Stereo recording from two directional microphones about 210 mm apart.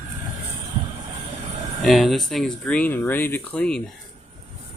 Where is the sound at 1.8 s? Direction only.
Centre (ahead or behind).